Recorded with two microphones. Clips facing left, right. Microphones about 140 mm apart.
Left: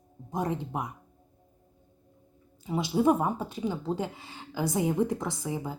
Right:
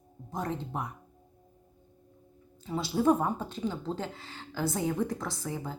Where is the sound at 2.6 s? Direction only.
15° left (ahead or behind).